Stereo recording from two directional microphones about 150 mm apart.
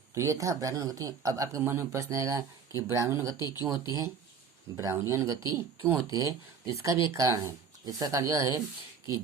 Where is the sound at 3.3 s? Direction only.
25° left (ahead or behind).